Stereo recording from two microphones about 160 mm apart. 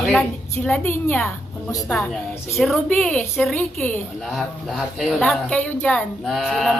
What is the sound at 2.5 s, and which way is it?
A woman's voice, centre (ahead or behind).